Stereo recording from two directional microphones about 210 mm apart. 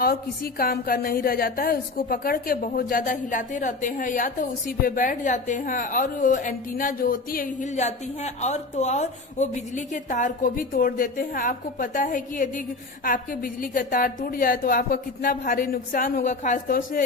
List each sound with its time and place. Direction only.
0.0 s a woman's voice: 45° left (ahead or behind)